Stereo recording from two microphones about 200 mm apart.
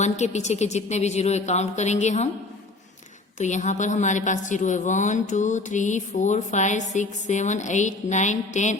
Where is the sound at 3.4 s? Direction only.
35° left (ahead or behind).